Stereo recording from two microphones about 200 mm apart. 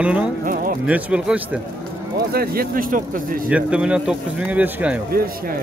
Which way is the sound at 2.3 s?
50° right (ahead or behind).